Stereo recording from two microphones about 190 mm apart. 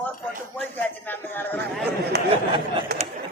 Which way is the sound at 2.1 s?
60° right (ahead or behind).